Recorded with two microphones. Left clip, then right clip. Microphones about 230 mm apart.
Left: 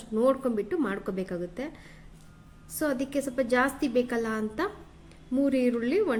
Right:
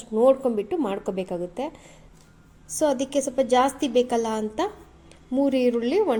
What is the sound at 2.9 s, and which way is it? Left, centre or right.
A woman's voice, centre.